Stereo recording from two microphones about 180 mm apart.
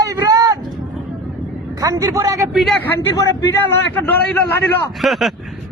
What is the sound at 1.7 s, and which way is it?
Speech, 20° right (ahead or behind).